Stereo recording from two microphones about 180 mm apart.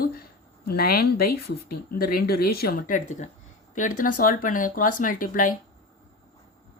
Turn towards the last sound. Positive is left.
turn(degrees=50)  # may be behind; listen again after turning